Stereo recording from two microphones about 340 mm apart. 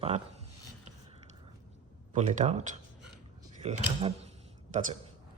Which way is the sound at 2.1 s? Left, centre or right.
Right.